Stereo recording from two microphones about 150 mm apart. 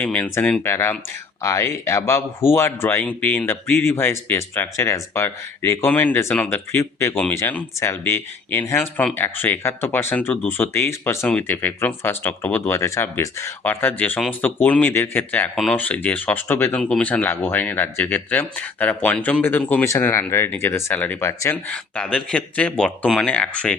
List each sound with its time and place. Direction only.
0.0 s speech: 10° left (ahead or behind)